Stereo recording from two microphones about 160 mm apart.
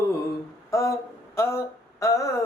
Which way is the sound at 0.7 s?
20° left (ahead or behind).